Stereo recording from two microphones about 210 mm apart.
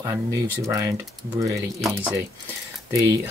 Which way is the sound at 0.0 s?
15° right (ahead or behind).